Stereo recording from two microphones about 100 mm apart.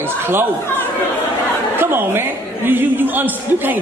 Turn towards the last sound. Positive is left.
turn(degrees=-20)  # may be behind; listen again after turning